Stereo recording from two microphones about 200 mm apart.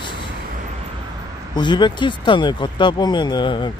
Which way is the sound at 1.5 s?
20° left (ahead or behind).